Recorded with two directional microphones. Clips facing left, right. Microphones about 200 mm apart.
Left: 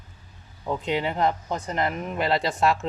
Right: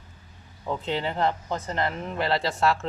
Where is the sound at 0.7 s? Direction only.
15° left (ahead or behind).